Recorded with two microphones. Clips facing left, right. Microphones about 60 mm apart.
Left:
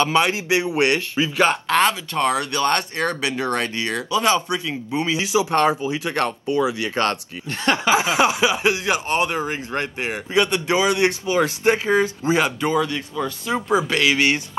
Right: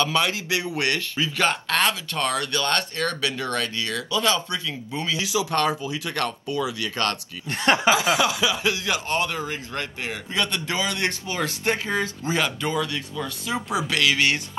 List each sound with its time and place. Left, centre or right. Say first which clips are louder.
0.0 s speech: left 4 dB; left
7.4 s speech: right 1 dB; right
7.9 s speech: left 3 dB; left